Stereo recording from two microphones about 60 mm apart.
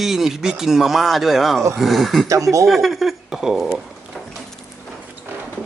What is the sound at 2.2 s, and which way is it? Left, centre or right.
Speech, right.